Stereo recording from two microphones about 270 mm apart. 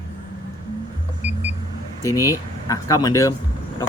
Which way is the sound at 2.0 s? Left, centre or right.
Centre.